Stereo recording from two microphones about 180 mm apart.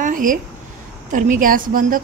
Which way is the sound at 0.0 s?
50° right (ahead or behind).